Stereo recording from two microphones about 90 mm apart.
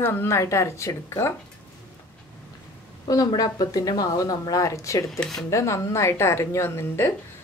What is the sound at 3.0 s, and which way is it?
Speech, 45° left (ahead or behind).